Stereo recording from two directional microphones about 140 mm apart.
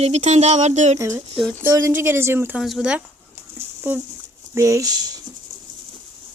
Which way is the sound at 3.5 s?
15° right (ahead or behind).